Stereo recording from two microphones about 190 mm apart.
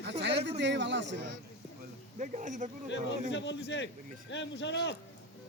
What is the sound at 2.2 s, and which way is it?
Speech, 40° right (ahead or behind).